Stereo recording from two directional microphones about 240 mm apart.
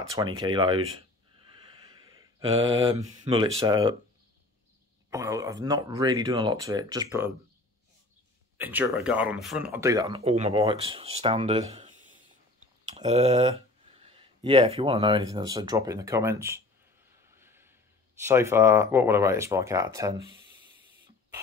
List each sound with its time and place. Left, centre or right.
0.1 s speech: centre
2.9 s speech: centre
5.1 s speech: centre
8.5 s speech: centre
17.4 s a sound: centre
18.2 s speech: centre